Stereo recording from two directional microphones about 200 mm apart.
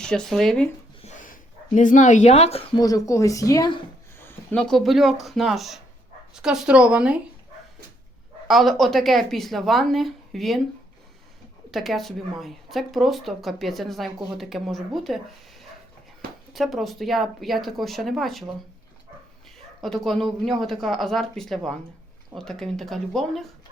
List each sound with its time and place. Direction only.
0.0 s speech: 5° left (ahead or behind)
1.0 s speech: 40° left (ahead or behind); by 3.8 s 20° left (ahead or behind)
4.2 s speech: 10° left (ahead or behind)
8.4 s speech: centre (ahead or behind)
11.7 s speech: centre (ahead or behind)
16.5 s speech: centre (ahead or behind)
19.5 s speech: centre (ahead or behind)